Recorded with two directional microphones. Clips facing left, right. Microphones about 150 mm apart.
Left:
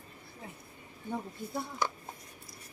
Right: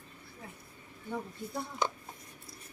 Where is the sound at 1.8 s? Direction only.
20° right (ahead or behind).